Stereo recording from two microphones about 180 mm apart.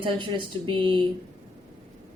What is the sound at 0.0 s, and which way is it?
A woman's voice, 30° right (ahead or behind).